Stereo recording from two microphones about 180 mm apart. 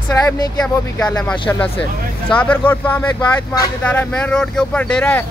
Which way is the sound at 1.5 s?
10° left (ahead or behind).